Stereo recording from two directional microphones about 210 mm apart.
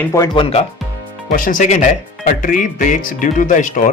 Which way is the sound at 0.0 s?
15° left (ahead or behind).